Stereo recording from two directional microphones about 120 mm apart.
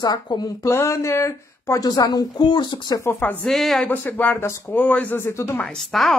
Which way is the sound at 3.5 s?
Centre (ahead or behind).